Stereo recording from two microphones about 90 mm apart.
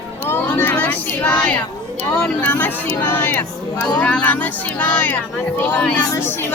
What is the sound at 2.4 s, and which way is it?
Speech, 20° left (ahead or behind).